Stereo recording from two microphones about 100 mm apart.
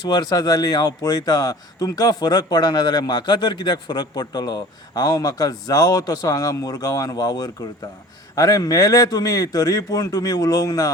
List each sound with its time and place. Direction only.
0.1 s speech: 45° left (ahead or behind)